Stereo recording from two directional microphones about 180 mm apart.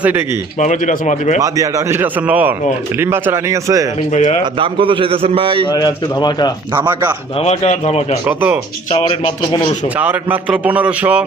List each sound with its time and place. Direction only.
0.6 s speech: 40° left (ahead or behind)
1.4 s speech: 15° right (ahead or behind)
4.1 s speech: 40° left (ahead or behind)
4.6 s a man's voice: 30° right (ahead or behind)
5.7 s speech: 25° left (ahead or behind)
7.4 s speech: 35° left (ahead or behind)
8.3 s speech: 10° right (ahead or behind)
8.9 s speech: 25° left (ahead or behind)
10.0 s speech: 10° right (ahead or behind)